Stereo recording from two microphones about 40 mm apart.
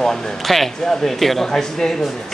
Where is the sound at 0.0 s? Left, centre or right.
Centre.